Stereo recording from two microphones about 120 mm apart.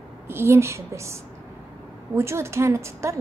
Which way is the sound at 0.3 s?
20° right (ahead or behind).